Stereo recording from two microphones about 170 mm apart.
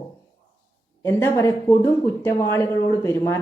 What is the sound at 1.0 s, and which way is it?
A woman's voice, 15° left (ahead or behind).